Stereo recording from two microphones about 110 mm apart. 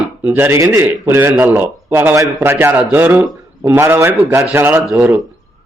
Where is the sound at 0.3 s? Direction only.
20° right (ahead or behind).